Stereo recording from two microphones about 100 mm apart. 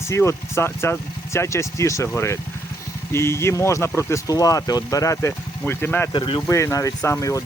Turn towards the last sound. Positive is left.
turn(degrees=35)  # may be behind; listen again after turning